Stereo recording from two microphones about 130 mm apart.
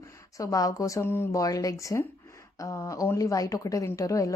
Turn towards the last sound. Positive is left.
turn(degrees=25)  # may be behind; listen again after turning